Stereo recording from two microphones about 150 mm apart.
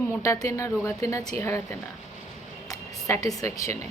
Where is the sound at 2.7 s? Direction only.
20° left (ahead or behind).